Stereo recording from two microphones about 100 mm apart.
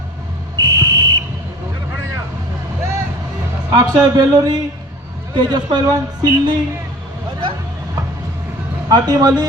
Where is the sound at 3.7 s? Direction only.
40° right (ahead or behind).